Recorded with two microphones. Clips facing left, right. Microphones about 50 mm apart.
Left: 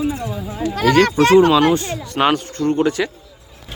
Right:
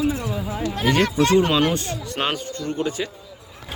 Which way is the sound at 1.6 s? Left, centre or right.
Left.